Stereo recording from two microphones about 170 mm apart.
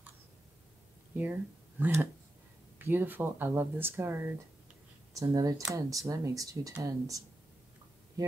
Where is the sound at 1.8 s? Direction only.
15° right (ahead or behind).